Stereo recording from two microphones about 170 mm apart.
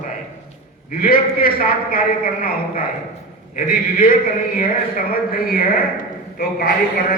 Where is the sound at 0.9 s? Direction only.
55° left (ahead or behind).